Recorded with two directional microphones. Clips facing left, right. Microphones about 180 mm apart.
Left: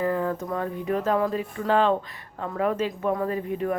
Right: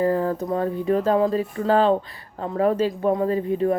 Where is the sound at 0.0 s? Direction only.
35° right (ahead or behind).